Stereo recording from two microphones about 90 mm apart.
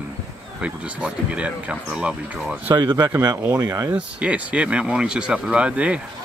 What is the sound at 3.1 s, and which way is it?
Speech, 40° right (ahead or behind).